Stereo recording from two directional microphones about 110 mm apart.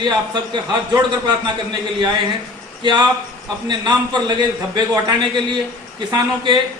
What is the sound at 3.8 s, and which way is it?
Speech, 45° right (ahead or behind).